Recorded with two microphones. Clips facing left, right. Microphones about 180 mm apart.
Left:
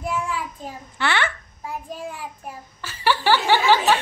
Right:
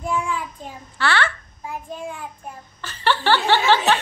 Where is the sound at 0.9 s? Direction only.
20° left (ahead or behind).